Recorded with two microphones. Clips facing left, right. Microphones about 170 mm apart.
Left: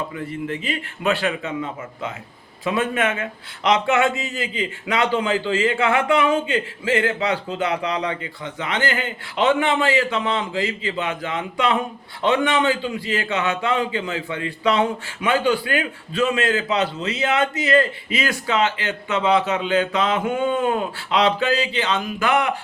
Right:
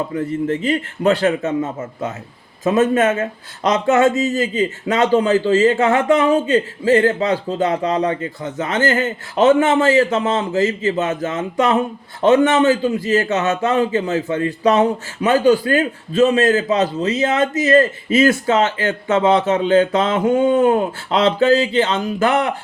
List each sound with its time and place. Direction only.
0.1 s a man's voice: 40° right (ahead or behind)